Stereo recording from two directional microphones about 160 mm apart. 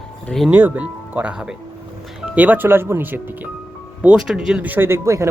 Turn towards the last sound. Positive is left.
turn(degrees=-20)  # may be behind; listen again after turning